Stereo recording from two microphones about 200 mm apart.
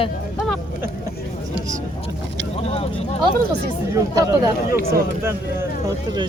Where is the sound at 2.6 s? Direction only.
30° left (ahead or behind).